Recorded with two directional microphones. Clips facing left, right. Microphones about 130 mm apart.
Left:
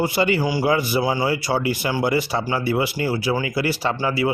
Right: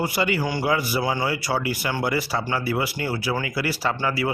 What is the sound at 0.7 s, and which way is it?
Speech, 25° left (ahead or behind).